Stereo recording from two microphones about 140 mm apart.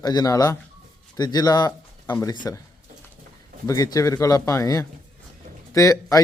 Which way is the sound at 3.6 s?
25° left (ahead or behind).